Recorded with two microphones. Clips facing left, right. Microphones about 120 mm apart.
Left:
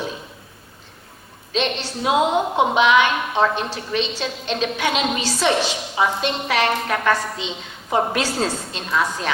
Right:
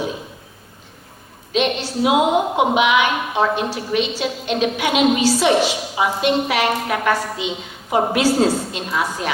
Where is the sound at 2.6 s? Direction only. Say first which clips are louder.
Left 3 dB; 15° right (ahead or behind).